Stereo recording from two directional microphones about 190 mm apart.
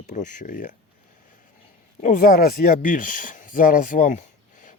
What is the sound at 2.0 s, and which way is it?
Speech, 45° left (ahead or behind).